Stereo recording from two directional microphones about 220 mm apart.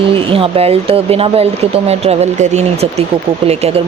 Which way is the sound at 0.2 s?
25° right (ahead or behind).